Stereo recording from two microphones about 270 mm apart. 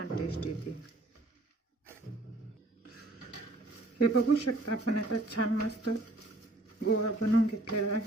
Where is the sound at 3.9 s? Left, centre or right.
Left.